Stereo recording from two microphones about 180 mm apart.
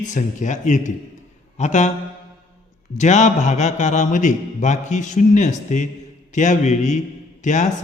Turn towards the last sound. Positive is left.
turn(degrees=45)  # may be behind; listen again after turning